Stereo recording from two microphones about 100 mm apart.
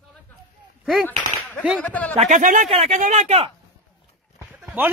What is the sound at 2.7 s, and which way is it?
Speech, 90° right.